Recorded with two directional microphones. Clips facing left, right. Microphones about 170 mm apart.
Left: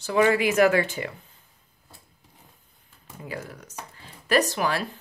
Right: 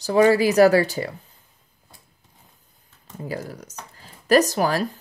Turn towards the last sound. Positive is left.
turn(degrees=-40)  # may be behind; listen again after turning